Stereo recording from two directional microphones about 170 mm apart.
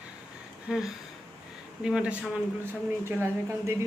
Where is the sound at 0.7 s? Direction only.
5° right (ahead or behind).